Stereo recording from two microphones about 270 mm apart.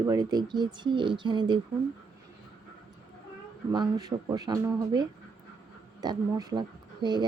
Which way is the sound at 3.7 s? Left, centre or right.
Centre.